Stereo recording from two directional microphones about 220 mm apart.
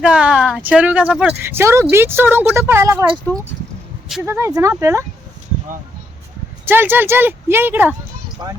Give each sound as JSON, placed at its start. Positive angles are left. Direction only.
{"t": 0.0, "sound": "speech", "side_deg": -5}
{"t": 4.1, "sound": "speech", "side_deg": -10}
{"t": 6.7, "sound": "speech", "side_deg": -10}